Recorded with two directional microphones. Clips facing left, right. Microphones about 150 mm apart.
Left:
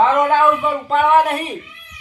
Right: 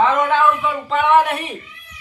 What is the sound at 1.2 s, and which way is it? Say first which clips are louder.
Speech: left 3 dB; 40° left (ahead or behind).